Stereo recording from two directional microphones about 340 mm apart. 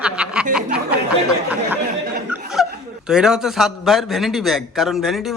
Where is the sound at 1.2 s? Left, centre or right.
Centre.